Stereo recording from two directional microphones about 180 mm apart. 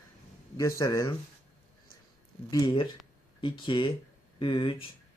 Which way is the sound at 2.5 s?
25° left (ahead or behind).